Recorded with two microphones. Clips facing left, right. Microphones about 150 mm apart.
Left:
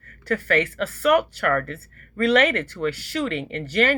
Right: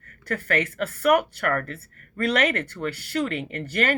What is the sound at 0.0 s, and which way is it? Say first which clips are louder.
A woman's voice: left 4 dB; 45° right (ahead or behind).